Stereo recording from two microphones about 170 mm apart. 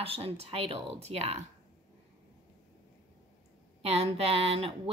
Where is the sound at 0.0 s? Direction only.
35° right (ahead or behind).